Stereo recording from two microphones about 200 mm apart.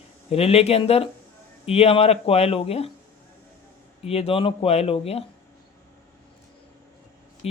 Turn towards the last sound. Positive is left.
turn(degrees=30)  # may be behind; listen again after turning